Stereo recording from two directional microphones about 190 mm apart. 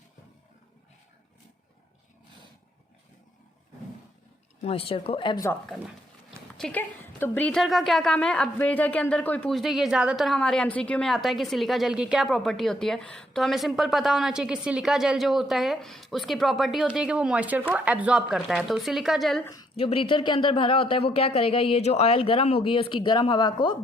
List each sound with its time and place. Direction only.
4.6 s speech: 30° left (ahead or behind)
5.6 s a woman's voice: centre (ahead or behind)
19.7 s speech: 30° left (ahead or behind)